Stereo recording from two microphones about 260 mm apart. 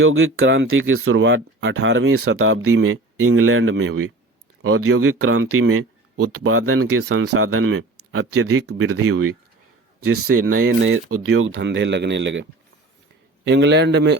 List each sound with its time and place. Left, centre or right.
0.0 s speech: right